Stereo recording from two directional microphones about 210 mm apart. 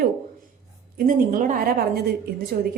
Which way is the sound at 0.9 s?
40° right (ahead or behind).